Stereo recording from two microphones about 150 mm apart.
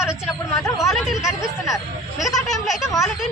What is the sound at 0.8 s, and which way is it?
Speech, centre (ahead or behind).